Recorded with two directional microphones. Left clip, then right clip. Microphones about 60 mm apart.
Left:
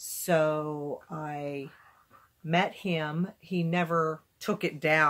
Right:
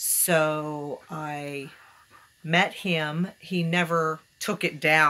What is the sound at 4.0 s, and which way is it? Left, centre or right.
Speech, left.